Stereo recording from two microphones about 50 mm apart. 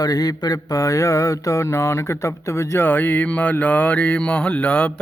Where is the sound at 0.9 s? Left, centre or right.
Left.